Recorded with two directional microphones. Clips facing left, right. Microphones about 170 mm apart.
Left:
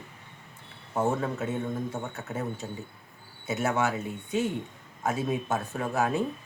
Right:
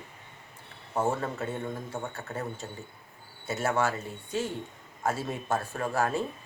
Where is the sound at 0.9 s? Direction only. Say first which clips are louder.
Left 1 dB; centre (ahead or behind).